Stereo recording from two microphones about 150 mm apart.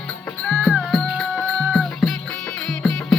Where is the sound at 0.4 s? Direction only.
Centre (ahead or behind).